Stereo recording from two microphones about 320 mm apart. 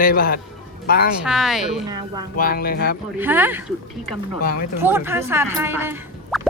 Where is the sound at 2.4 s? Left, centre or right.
Left.